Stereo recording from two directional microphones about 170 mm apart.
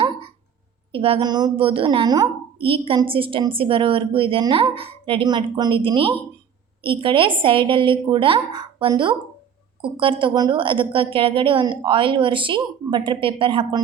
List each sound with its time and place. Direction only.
0.9 s a woman's voice: 35° right (ahead or behind)